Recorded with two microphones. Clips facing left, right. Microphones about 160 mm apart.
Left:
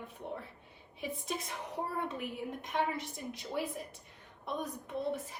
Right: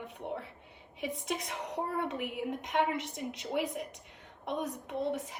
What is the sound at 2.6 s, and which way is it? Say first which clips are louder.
A woman's voice: right 3 dB; 80° right.